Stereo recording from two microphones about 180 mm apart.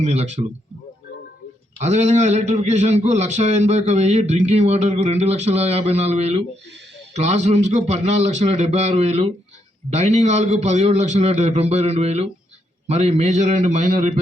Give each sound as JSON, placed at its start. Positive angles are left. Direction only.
{"t": 0.0, "sound": "a man's voice", "side_deg": -35}
{"t": 1.8, "sound": "a man's voice", "side_deg": -40}